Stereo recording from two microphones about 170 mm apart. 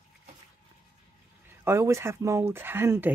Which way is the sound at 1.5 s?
15° right (ahead or behind).